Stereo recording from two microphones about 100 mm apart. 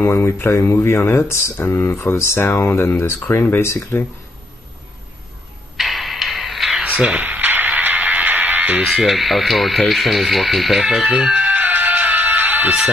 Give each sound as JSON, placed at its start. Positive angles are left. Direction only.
{"t": 0.1, "sound": "speech", "side_deg": 30}
{"t": 5.8, "sound": "a sound", "side_deg": 0}
{"t": 6.8, "sound": "music", "side_deg": -15}
{"t": 8.8, "sound": "speech", "side_deg": 0}